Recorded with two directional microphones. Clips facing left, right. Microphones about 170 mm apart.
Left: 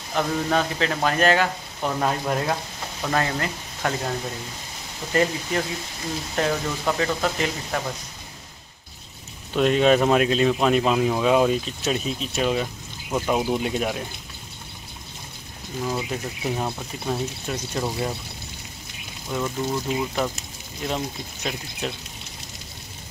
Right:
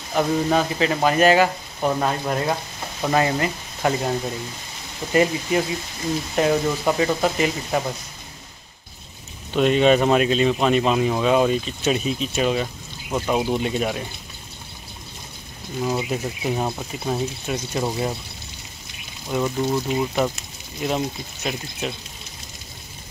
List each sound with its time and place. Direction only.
0.1 s speech: 10° right (ahead or behind)
5.1 s speech: 10° right (ahead or behind)
9.5 s speech: centre (ahead or behind)
15.8 s speech: 10° right (ahead or behind)
19.3 s speech: 15° right (ahead or behind)
20.8 s speech: 5° right (ahead or behind)